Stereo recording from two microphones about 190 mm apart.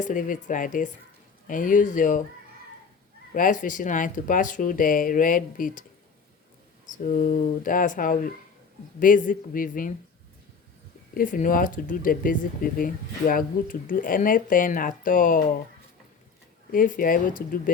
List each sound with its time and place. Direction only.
0.0 s speech: 45° left (ahead or behind)
3.3 s speech: 45° left (ahead or behind)
7.0 s speech: 45° left (ahead or behind)
11.1 s speech: 45° left (ahead or behind)
16.7 s speech: 45° left (ahead or behind)